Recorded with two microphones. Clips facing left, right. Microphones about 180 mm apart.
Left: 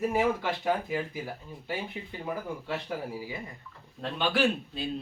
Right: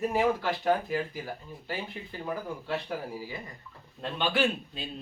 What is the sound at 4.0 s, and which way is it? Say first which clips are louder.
Speech: left 1 dB; centre (ahead or behind).